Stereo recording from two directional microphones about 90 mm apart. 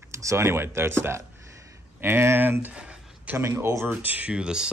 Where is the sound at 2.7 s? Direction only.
10° right (ahead or behind).